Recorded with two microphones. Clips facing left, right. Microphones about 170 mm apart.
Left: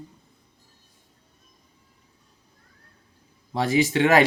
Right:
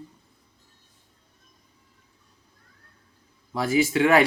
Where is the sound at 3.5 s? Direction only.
30° left (ahead or behind).